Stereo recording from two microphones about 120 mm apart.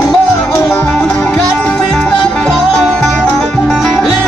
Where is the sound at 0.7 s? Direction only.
15° left (ahead or behind).